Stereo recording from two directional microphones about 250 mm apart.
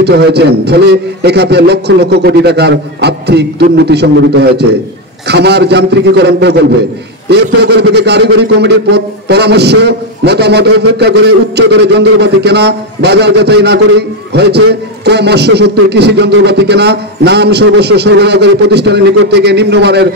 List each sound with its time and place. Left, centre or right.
0.0 s a man's voice: right